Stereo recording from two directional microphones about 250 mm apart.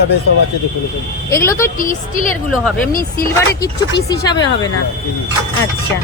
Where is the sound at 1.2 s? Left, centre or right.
Centre.